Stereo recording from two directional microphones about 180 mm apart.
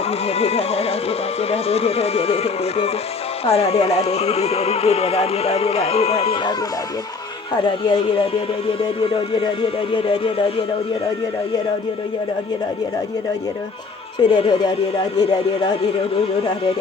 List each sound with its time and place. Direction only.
0.1 s speech: 35° left (ahead or behind)
7.6 s speech: 25° left (ahead or behind)
9.3 s speech: 25° left (ahead or behind)
14.2 s speech: 25° left (ahead or behind)